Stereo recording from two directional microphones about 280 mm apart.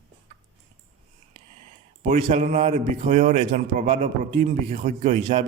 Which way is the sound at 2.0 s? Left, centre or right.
Right.